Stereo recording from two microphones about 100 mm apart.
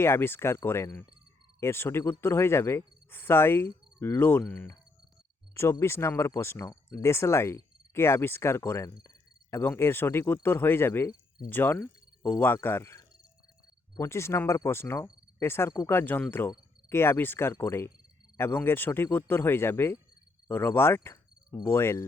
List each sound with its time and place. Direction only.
0.0 s speech: 25° left (ahead or behind)
5.8 s speech: 25° left (ahead or behind)
20.5 s cricket: 25° left (ahead or behind)